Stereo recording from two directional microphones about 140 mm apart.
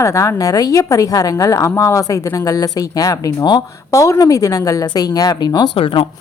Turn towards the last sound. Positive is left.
turn(degrees=35)  # may be behind; listen again after turning